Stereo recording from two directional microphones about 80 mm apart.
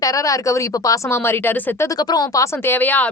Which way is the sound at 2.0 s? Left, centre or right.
Left.